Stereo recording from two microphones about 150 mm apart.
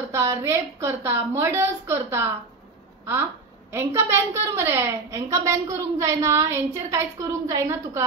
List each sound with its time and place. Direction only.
0.1 s a woman's voice: 20° right (ahead or behind)
3.7 s a woman's voice: 15° right (ahead or behind)